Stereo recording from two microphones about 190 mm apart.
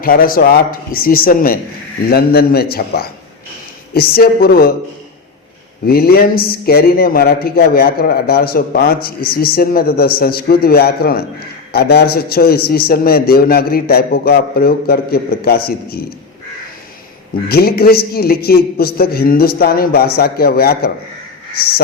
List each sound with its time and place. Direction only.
0.0 s a man's voice: 50° left (ahead or behind)
5.8 s a man's voice: 55° left (ahead or behind)
17.5 s a man's voice: 55° left (ahead or behind)